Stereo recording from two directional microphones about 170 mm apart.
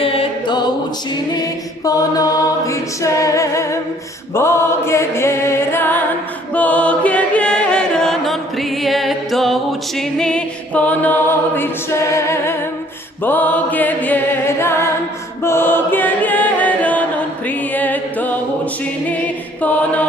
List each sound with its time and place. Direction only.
0.0 s music: 35° left (ahead or behind)
1.8 s a capella: 20° left (ahead or behind)
6.5 s music: 10° left (ahead or behind)
10.0 s a capella: 5° left (ahead or behind)
13.2 s music: 10° left (ahead or behind)
15.4 s chant: 15° left (ahead or behind)
17.7 s singing: 10° left (ahead or behind)
19.6 s chant: 10° left (ahead or behind)